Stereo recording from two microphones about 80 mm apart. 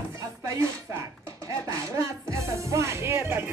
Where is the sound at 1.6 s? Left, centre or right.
Right.